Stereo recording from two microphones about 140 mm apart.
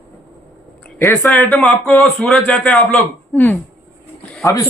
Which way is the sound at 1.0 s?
20° left (ahead or behind).